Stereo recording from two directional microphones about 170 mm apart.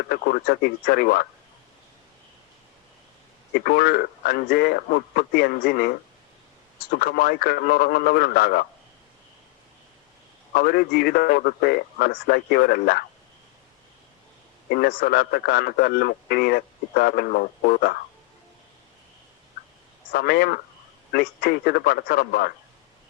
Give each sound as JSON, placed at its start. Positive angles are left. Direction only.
{"t": 0.1, "sound": "a man's voice", "side_deg": 65}
{"t": 3.5, "sound": "a man's voice", "side_deg": 65}
{"t": 10.5, "sound": "a man's voice", "side_deg": 65}
{"t": 14.7, "sound": "a man's voice", "side_deg": 65}
{"t": 20.1, "sound": "a man's voice", "side_deg": 65}